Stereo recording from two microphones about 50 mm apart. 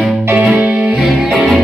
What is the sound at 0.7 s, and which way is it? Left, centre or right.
Music, right.